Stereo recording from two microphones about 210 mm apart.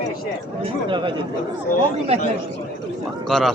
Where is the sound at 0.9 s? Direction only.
25° right (ahead or behind).